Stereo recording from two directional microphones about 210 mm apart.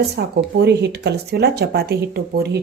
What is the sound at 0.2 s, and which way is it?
Speech, 50° right (ahead or behind).